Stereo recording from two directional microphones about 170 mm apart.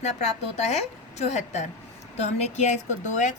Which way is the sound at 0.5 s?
40° left (ahead or behind).